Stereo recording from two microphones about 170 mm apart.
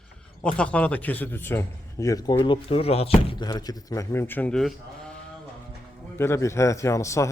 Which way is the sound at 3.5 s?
25° left (ahead or behind).